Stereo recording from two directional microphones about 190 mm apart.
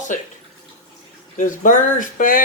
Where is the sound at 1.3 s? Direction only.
45° left (ahead or behind).